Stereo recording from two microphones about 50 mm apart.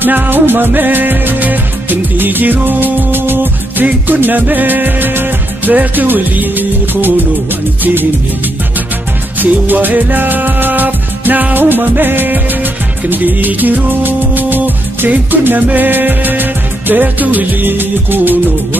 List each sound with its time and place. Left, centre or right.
0.0 s music: right
9.4 s music: right